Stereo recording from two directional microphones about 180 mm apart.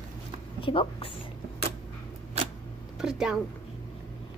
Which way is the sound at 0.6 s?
30° left (ahead or behind).